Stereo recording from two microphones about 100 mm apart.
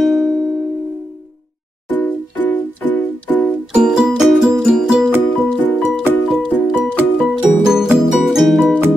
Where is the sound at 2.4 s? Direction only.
15° left (ahead or behind).